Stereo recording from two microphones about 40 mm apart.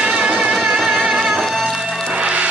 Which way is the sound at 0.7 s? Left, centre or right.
Centre.